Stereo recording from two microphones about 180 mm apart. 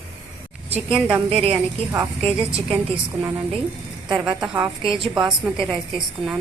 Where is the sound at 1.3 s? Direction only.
30° right (ahead or behind).